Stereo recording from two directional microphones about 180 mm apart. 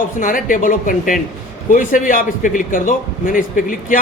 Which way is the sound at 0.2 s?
50° left (ahead or behind).